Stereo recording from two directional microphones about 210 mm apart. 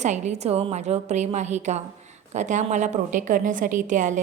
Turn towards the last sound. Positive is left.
turn(degrees=-35)  # may be behind; listen again after turning